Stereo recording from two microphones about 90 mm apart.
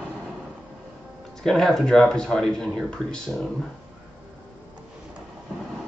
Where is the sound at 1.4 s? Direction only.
5° left (ahead or behind).